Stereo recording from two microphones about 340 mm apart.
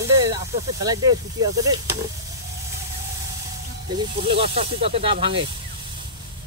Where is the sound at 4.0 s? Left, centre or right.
Centre.